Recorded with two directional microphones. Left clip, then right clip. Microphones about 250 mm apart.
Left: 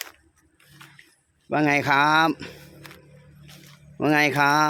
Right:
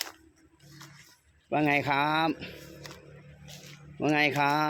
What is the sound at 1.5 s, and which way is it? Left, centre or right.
Speech, left.